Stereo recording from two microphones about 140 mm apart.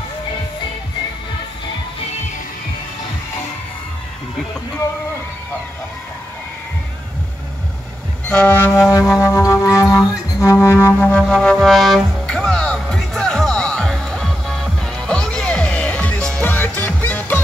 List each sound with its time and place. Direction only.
8.3 s music: 15° left (ahead or behind)